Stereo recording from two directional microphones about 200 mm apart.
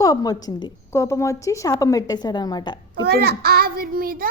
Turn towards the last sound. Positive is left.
turn(degrees=-45)  # may be behind; listen again after turning